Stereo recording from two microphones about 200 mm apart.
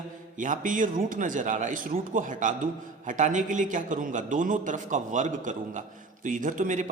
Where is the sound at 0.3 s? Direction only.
40° right (ahead or behind).